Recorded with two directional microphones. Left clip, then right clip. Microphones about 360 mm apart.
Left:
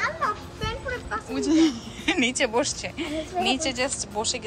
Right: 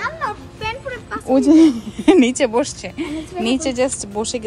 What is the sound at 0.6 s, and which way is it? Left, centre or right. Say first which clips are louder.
Speech: right 5 dB; centre.